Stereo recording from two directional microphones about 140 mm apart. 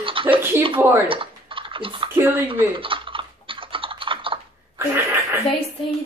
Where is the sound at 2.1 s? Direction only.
15° right (ahead or behind).